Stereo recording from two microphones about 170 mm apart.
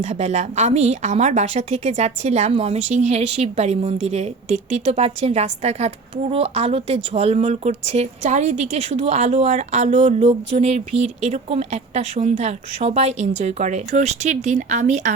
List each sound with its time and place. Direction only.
0.0 s a woman's voice: 40° right (ahead or behind)